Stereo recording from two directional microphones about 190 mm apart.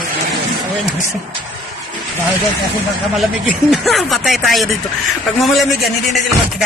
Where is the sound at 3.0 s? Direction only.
Centre (ahead or behind).